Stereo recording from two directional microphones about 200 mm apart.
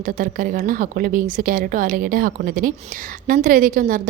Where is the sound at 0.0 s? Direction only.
45° right (ahead or behind).